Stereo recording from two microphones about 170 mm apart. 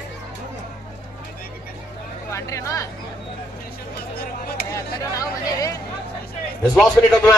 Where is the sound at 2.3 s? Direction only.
20° left (ahead or behind).